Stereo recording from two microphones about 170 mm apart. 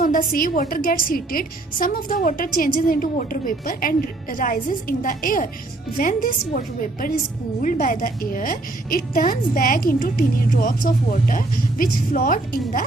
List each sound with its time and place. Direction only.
0.0 s a woman's voice: 55° left (ahead or behind)
7.6 s a woman's voice: 50° left (ahead or behind)